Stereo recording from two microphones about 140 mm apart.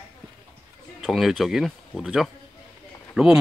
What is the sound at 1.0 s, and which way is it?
Speech, centre (ahead or behind).